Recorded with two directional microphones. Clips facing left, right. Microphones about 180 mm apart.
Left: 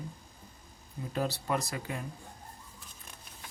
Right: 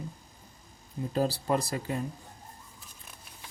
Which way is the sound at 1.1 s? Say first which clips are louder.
Right 4 dB; 35° right (ahead or behind).